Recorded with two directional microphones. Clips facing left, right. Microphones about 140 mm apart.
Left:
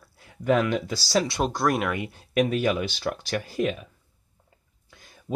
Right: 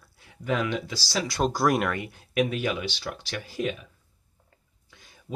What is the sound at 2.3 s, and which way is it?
Speech, 40° left (ahead or behind).